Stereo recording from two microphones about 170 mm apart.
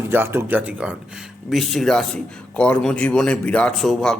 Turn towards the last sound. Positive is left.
turn(degrees=0)  # may be behind; listen again after turning